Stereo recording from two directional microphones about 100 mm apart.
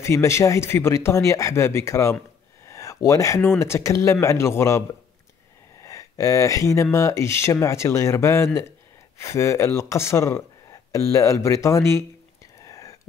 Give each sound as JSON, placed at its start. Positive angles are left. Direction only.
{"t": 0.0, "sound": "speech", "side_deg": 30}
{"t": 2.6, "sound": "a sound", "side_deg": 30}
{"t": 3.3, "sound": "speech", "side_deg": 25}
{"t": 12.6, "sound": "whispering", "side_deg": 30}